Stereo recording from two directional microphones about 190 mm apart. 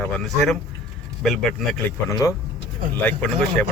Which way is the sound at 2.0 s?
15° left (ahead or behind).